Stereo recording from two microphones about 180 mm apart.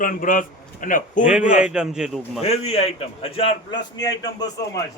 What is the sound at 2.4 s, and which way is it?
A man's voice, 35° left (ahead or behind).